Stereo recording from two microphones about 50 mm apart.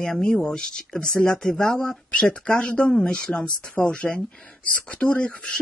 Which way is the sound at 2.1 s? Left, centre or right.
Left.